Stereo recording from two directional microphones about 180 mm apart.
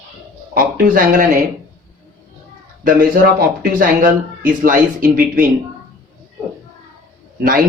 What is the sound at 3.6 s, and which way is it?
Speech, 50° right (ahead or behind).